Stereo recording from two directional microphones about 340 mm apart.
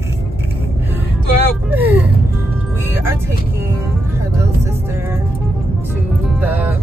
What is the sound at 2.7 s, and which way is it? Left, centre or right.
Music, centre.